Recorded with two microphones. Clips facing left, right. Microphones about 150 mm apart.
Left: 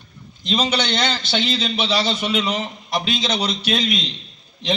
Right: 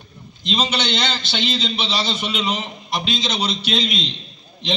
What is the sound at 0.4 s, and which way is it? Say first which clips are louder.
A man's voice: left 1 dB; 20° right (ahead or behind).